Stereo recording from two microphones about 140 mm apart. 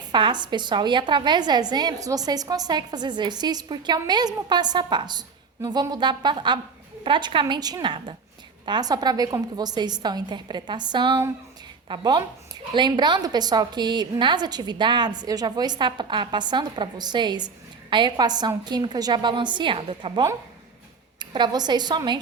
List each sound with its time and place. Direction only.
0.1 s a woman's voice: 35° right (ahead or behind)